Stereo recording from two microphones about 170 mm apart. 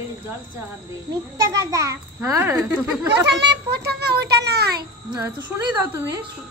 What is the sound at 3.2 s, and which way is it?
A child's voice, 90° right.